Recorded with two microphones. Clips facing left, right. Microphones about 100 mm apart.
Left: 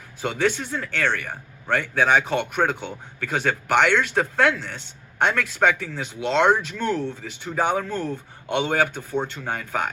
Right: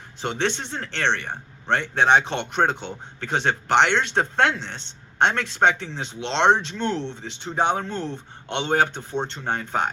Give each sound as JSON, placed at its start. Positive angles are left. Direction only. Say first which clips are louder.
{"t": 0.2, "sound": "a man's voice", "louder": "left 2 dB", "side_deg": -25}